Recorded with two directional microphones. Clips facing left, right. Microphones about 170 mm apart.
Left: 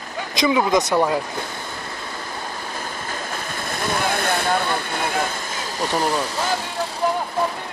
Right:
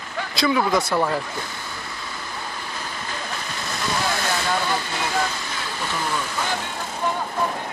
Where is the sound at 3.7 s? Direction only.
55° left (ahead or behind).